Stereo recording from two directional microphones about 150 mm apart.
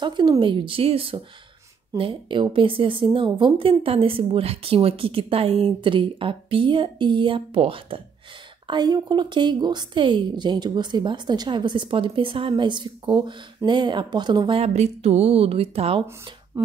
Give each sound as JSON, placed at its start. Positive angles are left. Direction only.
{"t": 0.0, "sound": "a woman's voice", "side_deg": -30}
{"t": 14.6, "sound": "a woman's voice", "side_deg": -45}
{"t": 16.5, "sound": "speech", "side_deg": -15}